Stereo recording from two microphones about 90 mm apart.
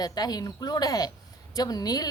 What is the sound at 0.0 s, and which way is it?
A woman's voice, 45° left (ahead or behind).